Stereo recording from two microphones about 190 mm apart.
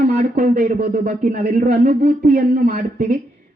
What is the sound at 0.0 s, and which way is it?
Speech, 45° right (ahead or behind).